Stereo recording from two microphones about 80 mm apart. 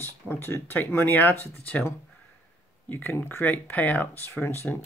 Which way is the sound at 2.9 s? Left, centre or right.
Left.